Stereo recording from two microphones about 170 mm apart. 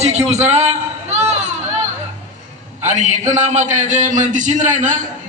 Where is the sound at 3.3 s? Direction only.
45° right (ahead or behind).